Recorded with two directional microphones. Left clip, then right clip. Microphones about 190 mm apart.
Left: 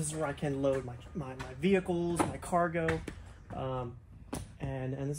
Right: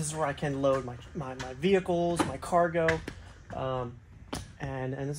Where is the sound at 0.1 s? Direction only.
40° right (ahead or behind).